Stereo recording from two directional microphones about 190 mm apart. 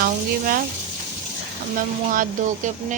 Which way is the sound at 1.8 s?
45° right (ahead or behind).